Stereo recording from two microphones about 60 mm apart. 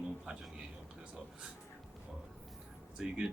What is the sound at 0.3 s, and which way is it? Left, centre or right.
Speech, centre.